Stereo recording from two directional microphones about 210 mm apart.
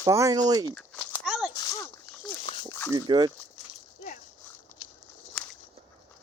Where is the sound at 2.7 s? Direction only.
10° left (ahead or behind).